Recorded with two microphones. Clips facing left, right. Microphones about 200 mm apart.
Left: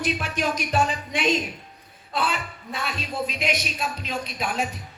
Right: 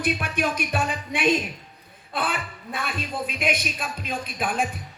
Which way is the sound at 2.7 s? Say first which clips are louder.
Even; 55° right (ahead or behind).